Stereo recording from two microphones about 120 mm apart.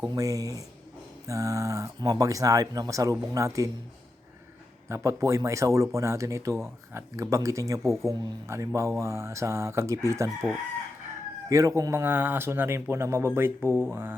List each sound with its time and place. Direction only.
0.1 s speech: 30° right (ahead or behind)
4.9 s a man's voice: 25° right (ahead or behind)
11.4 s speech: 25° right (ahead or behind)